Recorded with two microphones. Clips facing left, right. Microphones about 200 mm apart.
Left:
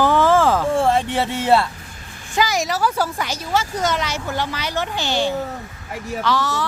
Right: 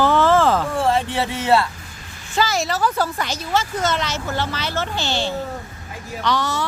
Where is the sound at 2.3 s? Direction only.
15° left (ahead or behind).